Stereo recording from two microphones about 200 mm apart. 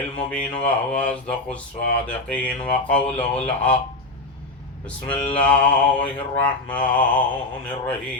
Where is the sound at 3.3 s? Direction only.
30° left (ahead or behind).